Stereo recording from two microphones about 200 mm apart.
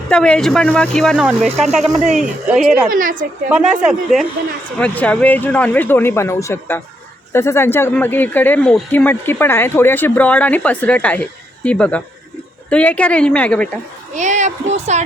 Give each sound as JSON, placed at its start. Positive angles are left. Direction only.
{"t": 0.1, "sound": "speech", "side_deg": 5}
{"t": 2.9, "sound": "a woman's voice", "side_deg": -45}
{"t": 3.5, "sound": "speech", "side_deg": -5}
{"t": 14.2, "sound": "a woman's voice", "side_deg": -35}